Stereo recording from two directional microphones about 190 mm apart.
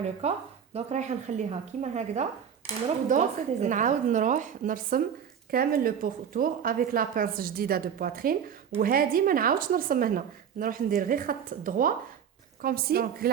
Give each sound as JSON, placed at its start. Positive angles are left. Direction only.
{"t": 0.2, "sound": "a woman's voice", "side_deg": -35}